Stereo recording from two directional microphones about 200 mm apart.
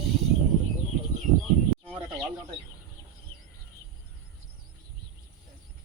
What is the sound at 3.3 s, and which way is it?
Bird, 15° left (ahead or behind).